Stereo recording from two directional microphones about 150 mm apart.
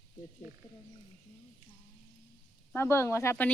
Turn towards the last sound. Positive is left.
turn(degrees=15)  # may be behind; listen again after turning